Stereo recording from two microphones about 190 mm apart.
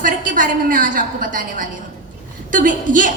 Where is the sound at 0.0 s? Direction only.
45° right (ahead or behind).